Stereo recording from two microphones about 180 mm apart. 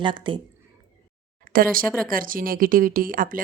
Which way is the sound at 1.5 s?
50° right (ahead or behind).